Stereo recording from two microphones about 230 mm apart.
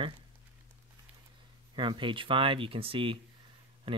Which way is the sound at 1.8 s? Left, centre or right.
Right.